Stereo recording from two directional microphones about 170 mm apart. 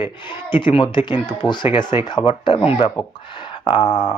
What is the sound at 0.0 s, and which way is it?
Speech, 30° left (ahead or behind).